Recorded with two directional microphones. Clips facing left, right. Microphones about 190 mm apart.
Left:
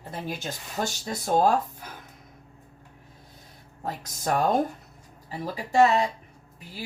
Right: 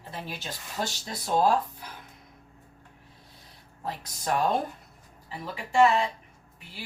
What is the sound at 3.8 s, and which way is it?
Speech, 45° left (ahead or behind).